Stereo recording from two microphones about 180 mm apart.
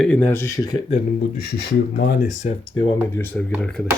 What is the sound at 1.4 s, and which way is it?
Speech, 60° left (ahead or behind).